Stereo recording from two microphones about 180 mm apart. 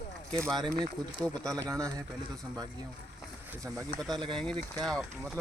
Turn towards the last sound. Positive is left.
turn(degrees=0)  # may be behind; listen again after turning